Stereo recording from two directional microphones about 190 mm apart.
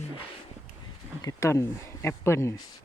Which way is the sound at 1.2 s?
15° left (ahead or behind).